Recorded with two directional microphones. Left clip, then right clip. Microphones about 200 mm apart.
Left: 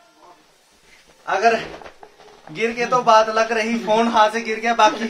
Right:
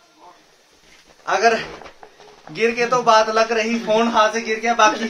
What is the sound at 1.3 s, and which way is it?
Speech, 10° right (ahead or behind).